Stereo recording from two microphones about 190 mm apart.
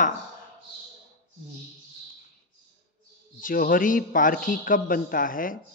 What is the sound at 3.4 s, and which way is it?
Mantra, 50° left (ahead or behind).